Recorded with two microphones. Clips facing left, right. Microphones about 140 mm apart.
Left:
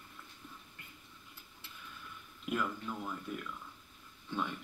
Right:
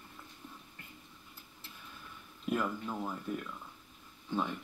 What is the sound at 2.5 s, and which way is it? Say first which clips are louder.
Speech: right 3 dB; 30° right (ahead or behind).